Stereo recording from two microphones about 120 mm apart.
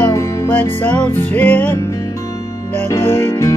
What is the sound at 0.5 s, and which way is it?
Music, 15° left (ahead or behind).